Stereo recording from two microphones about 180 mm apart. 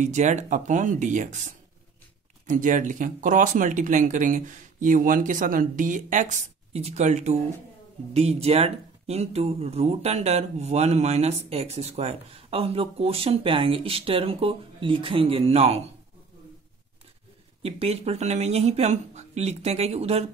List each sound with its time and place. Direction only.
0.0 s speech: 40° right (ahead or behind)
17.6 s speech: 35° right (ahead or behind)